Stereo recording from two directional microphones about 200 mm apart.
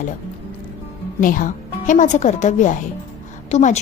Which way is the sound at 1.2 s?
40° left (ahead or behind).